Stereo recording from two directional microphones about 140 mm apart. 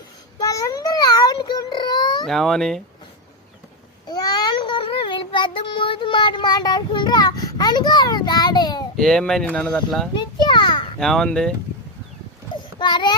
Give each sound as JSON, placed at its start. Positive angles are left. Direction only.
{"t": 0.3, "sound": "a sound", "side_deg": 25}
{"t": 2.2, "sound": "speech", "side_deg": 0}
{"t": 4.0, "sound": "child singing", "side_deg": 30}
{"t": 9.0, "sound": "speech", "side_deg": 5}
{"t": 10.2, "sound": "a sound", "side_deg": 30}
{"t": 11.0, "sound": "speech", "side_deg": 5}
{"t": 12.8, "sound": "child singing", "side_deg": 30}